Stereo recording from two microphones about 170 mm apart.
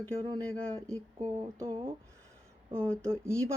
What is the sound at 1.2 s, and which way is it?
Speech, 20° right (ahead or behind).